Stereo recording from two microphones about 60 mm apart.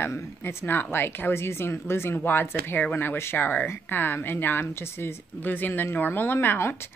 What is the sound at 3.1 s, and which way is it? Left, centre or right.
A woman's voice, left.